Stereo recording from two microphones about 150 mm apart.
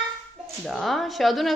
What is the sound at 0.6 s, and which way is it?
Speech, centre (ahead or behind).